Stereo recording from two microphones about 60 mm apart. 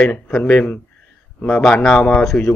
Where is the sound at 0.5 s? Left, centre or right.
Left.